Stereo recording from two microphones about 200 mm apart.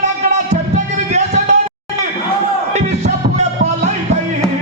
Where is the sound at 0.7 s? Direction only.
35° right (ahead or behind).